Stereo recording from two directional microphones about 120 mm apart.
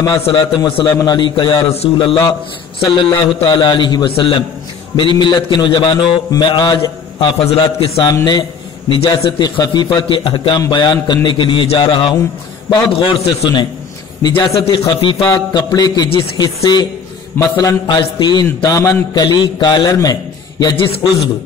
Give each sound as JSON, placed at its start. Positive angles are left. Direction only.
{"t": 0.0, "sound": "a man's voice", "side_deg": 35}
{"t": 2.9, "sound": "a man's voice", "side_deg": 45}
{"t": 6.4, "sound": "mantra", "side_deg": 40}
{"t": 7.4, "sound": "a man's voice", "side_deg": 55}
{"t": 8.0, "sound": "a man's voice", "side_deg": 35}
{"t": 9.4, "sound": "a man's voice", "side_deg": 35}
{"t": 14.2, "sound": "a man's voice", "side_deg": 35}
{"t": 14.6, "sound": "a man's voice", "side_deg": 45}
{"t": 15.5, "sound": "a man's voice", "side_deg": 30}
{"t": 17.4, "sound": "mantra", "side_deg": 30}
{"t": 17.8, "sound": "a man's voice", "side_deg": 40}
{"t": 20.7, "sound": "a man's voice", "side_deg": 50}